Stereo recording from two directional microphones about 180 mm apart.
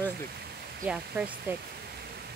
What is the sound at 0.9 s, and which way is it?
Speech, 5° right (ahead or behind).